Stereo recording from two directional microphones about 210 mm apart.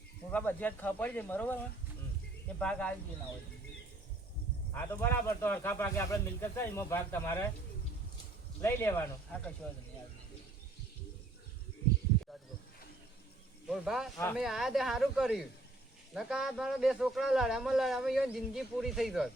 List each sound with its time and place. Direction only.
0.3 s speech: 5° left (ahead or behind)
2.6 s a man's voice: 5° left (ahead or behind)
4.7 s speech: 10° left (ahead or behind)
8.6 s speech: 10° left (ahead or behind)
13.7 s a man's voice: centre (ahead or behind)